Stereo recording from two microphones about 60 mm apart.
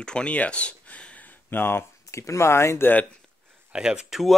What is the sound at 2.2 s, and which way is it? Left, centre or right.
Speech, left.